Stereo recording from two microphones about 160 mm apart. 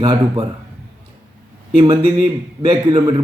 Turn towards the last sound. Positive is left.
turn(degrees=-30)  # may be behind; listen again after turning